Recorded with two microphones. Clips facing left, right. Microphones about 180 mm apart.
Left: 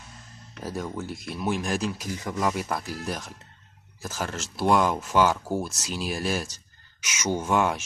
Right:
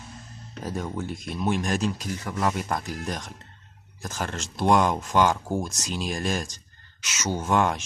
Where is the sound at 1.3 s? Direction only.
5° left (ahead or behind).